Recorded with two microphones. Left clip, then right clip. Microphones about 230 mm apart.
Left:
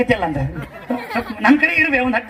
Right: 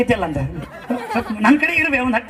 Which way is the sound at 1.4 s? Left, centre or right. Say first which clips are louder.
Left 2 dB; right.